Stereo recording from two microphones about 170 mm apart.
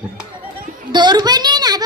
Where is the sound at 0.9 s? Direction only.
25° right (ahead or behind).